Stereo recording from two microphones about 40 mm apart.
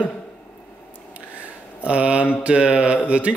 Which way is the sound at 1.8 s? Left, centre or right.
Right.